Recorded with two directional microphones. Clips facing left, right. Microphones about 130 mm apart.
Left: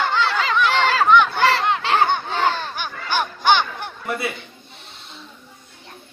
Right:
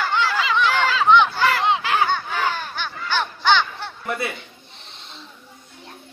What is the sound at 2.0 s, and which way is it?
Crowd, 20° left (ahead or behind).